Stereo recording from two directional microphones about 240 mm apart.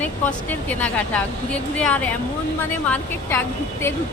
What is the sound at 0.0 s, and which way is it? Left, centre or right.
Speech, centre.